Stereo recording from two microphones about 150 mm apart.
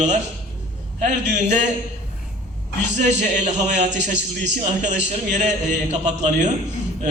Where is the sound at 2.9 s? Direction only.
55° right (ahead or behind).